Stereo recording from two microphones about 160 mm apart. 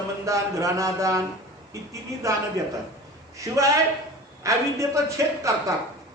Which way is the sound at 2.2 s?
20° right (ahead or behind).